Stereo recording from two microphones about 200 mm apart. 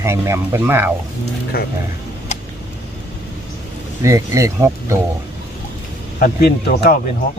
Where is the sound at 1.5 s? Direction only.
50° left (ahead or behind).